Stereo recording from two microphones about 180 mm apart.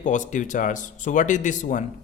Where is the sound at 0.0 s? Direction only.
45° left (ahead or behind).